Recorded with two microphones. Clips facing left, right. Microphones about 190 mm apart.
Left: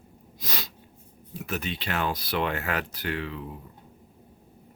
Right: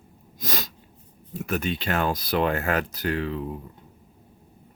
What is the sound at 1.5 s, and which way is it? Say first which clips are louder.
Speech: right 5 dB; 50° right (ahead or behind).